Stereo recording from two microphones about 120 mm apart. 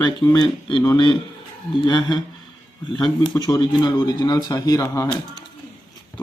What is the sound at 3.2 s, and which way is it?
Speech, 35° left (ahead or behind).